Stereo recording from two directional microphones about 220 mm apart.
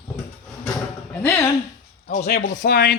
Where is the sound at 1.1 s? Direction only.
5° left (ahead or behind).